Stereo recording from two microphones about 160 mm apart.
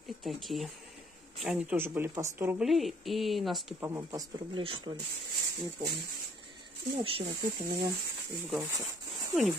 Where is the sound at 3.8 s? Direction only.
15° right (ahead or behind).